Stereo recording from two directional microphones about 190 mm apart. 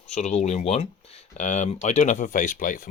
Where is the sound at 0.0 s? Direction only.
35° left (ahead or behind).